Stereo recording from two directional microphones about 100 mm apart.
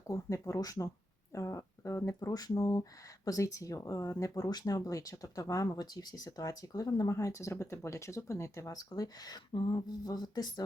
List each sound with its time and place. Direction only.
0.1 s speech: 30° left (ahead or behind)